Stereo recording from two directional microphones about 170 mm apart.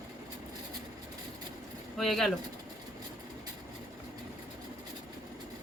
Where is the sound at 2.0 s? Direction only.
Centre (ahead or behind).